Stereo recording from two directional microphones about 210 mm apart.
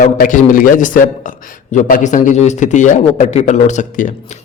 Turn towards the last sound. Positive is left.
turn(degrees=35)  # may be behind; listen again after turning